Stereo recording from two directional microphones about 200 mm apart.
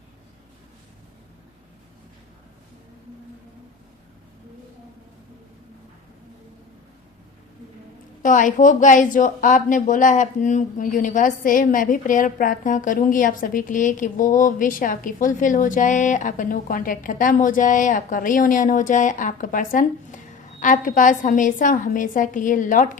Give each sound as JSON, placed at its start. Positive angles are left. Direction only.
{"t": 8.2, "sound": "a woman's voice", "side_deg": 40}